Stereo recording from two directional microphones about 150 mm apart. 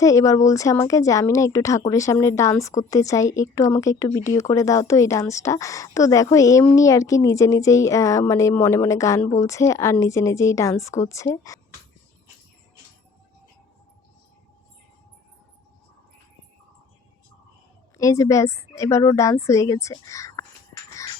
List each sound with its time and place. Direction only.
0.0 s speech: 20° left (ahead or behind)
17.9 s speech: 20° left (ahead or behind)